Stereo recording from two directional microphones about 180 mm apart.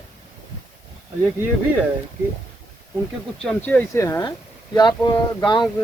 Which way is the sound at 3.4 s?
5° left (ahead or behind).